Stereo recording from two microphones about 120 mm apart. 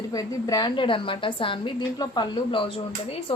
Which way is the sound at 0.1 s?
30° left (ahead or behind).